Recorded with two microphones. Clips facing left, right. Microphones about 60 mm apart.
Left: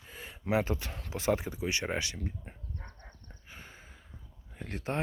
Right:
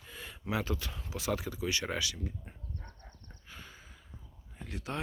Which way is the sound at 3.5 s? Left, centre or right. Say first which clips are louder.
Even; left.